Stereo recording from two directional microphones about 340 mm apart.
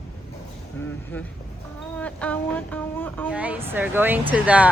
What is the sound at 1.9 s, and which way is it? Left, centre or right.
Speech, centre.